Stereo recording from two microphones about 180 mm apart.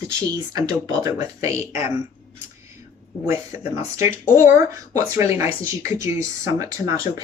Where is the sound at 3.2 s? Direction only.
15° right (ahead or behind).